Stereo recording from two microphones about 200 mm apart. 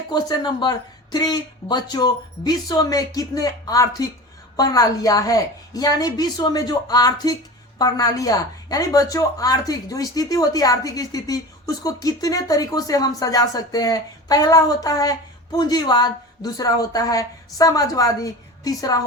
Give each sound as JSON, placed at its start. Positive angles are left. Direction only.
{"t": 0.1, "sound": "a woman's voice", "side_deg": 20}